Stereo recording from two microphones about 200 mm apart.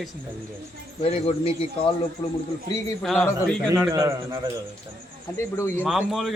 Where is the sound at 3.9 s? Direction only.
15° right (ahead or behind).